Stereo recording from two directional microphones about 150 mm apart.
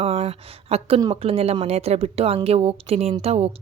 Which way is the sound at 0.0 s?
40° right (ahead or behind).